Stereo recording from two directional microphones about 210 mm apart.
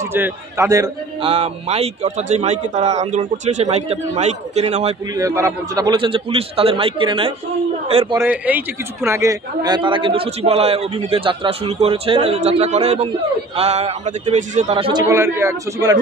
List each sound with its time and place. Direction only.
0.0 s a man's voice: 10° right (ahead or behind)
1.2 s a man's voice: 30° right (ahead or behind)
5.1 s a man's voice: 15° right (ahead or behind)
8.2 s a man's voice: 10° right (ahead or behind)